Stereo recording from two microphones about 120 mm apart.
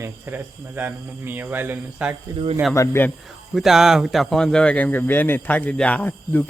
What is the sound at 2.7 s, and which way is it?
Speech, 25° left (ahead or behind).